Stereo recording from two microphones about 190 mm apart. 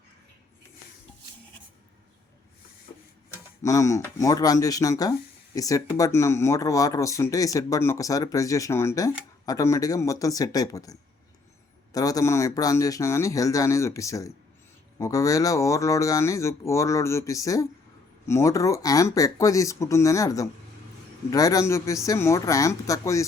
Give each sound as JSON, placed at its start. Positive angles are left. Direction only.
{"t": 3.6, "sound": "speech", "side_deg": 15}
{"t": 11.9, "sound": "speech", "side_deg": 20}